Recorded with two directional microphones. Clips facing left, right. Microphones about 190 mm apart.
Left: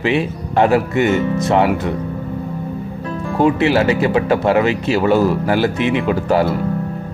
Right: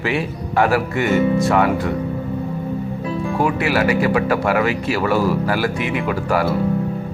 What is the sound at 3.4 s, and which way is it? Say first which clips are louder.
Speech: left 5 dB; 25° left (ahead or behind).